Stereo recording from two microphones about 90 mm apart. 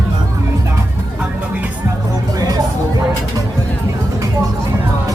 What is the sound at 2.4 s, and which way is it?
Music, 45° right (ahead or behind).